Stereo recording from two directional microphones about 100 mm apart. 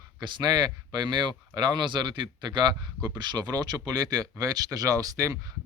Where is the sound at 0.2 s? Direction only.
45° right (ahead or behind).